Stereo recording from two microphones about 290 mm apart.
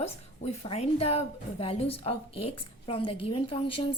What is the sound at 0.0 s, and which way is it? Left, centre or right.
A woman's voice, left.